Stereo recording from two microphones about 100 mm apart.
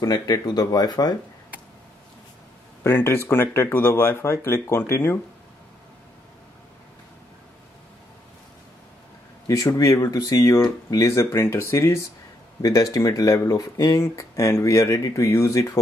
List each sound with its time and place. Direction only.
0.0 s speech: 40° left (ahead or behind)
2.8 s speech: 25° left (ahead or behind)
9.5 s speech: 30° left (ahead or behind)
12.6 s speech: 40° left (ahead or behind)
13.9 s speech: 30° left (ahead or behind)